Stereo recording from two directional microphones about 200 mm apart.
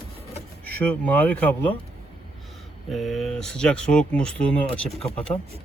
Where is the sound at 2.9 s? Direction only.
Centre (ahead or behind).